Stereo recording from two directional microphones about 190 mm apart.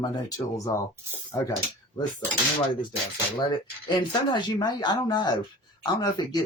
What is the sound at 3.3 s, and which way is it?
Speech, 25° left (ahead or behind).